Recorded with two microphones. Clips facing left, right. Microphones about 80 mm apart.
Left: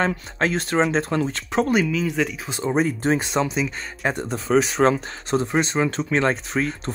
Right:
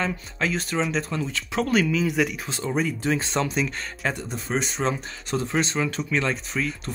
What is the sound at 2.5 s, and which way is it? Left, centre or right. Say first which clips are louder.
Speech: left 4 dB; left.